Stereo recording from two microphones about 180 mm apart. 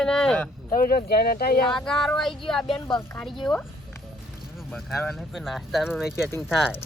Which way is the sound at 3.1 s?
5° left (ahead or behind).